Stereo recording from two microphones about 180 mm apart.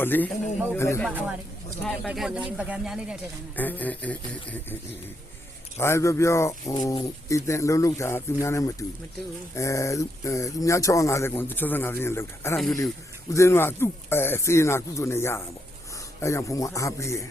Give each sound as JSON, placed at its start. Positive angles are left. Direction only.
{"t": 0.0, "sound": "speech", "side_deg": 10}
{"t": 1.8, "sound": "speech", "side_deg": 0}
{"t": 3.5, "sound": "speech", "side_deg": 10}